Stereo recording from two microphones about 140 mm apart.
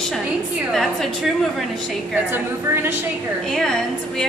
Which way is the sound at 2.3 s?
15° right (ahead or behind).